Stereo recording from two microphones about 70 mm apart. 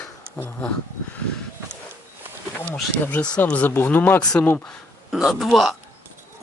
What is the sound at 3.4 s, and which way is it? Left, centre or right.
Speech, left.